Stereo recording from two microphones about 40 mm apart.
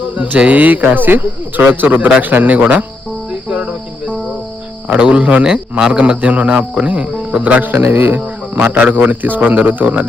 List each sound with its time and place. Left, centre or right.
0.1 s speech: right
3.5 s cricket: right
4.9 s speech: right
7.6 s a man's voice: right
8.6 s speech: right